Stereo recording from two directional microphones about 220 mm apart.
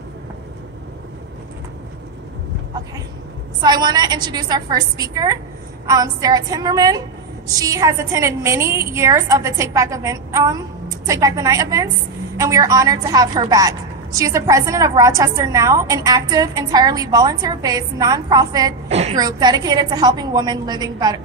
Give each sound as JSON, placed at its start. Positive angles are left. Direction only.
{"t": 3.6, "sound": "a woman's voice", "side_deg": -20}
{"t": 18.9, "sound": "a woman's voice", "side_deg": -30}
{"t": 19.1, "sound": "a woman's voice", "side_deg": -20}